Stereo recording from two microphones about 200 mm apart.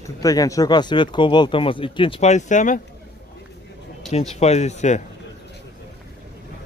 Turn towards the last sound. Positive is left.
turn(degrees=35)  # may be behind; listen again after turning